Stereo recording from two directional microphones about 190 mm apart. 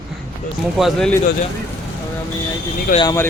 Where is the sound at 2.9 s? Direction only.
15° left (ahead or behind).